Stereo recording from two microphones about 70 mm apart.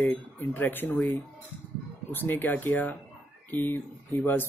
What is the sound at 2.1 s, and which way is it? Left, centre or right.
Speech, left.